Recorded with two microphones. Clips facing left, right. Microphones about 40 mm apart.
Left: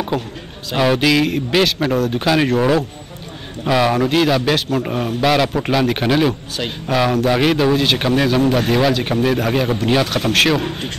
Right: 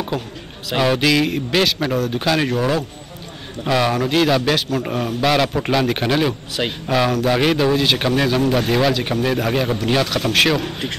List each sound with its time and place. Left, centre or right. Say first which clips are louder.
0.7 s a man's voice: left 2 dB; centre
6.6 s speech: right 4 dB; centre
7.2 s a man's voice: left 2 dB; centre